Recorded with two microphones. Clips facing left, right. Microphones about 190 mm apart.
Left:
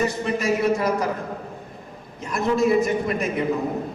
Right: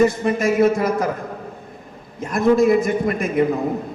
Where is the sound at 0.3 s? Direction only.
50° right (ahead or behind).